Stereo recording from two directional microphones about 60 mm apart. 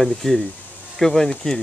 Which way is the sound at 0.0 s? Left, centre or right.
Centre.